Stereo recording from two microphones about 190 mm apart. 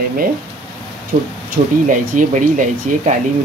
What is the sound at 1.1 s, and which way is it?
Speech, 40° right (ahead or behind).